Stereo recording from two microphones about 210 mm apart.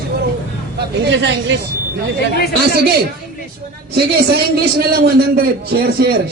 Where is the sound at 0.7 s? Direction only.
55° right (ahead or behind).